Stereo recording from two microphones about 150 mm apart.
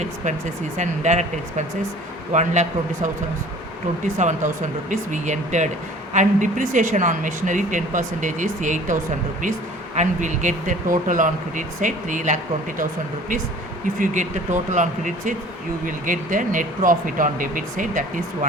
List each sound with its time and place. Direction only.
0.8 s speech: 50° right (ahead or behind)
4.2 s speech: 55° right (ahead or behind)
14.0 s speech: 55° right (ahead or behind)